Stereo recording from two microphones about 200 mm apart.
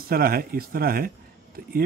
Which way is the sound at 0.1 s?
50° right (ahead or behind).